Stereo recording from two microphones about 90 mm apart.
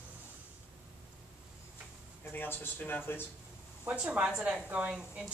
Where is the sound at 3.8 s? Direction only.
15° right (ahead or behind).